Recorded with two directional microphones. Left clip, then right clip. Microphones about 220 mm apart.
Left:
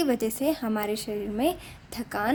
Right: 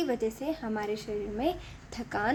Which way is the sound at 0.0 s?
25° left (ahead or behind).